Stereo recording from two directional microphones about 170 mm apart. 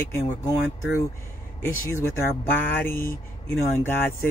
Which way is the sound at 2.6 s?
10° left (ahead or behind).